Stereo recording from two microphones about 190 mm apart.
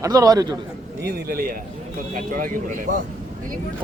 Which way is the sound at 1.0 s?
50° right (ahead or behind).